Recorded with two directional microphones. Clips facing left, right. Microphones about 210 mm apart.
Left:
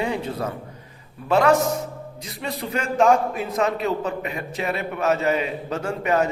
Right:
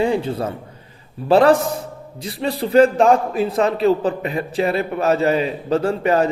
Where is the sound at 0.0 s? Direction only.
30° right (ahead or behind).